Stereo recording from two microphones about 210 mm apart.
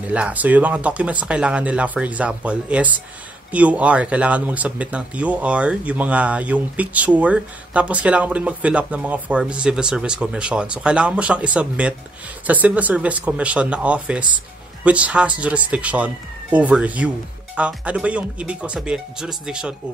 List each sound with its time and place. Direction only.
0.0 s speech: 5° right (ahead or behind)